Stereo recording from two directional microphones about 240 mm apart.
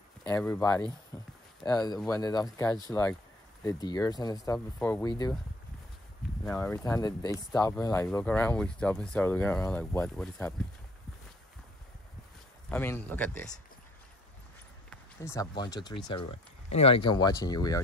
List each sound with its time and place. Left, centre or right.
0.3 s speech: centre
6.4 s speech: centre
12.6 s speech: centre
14.9 s speech: centre